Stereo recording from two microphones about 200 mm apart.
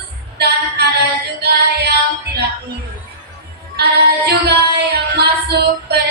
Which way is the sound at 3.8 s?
55° right (ahead or behind).